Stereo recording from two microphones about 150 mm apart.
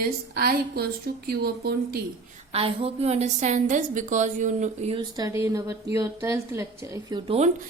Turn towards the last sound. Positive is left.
turn(degrees=-30)  # may be behind; listen again after turning